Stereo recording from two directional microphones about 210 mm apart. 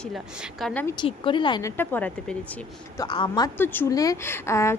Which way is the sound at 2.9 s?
25° left (ahead or behind).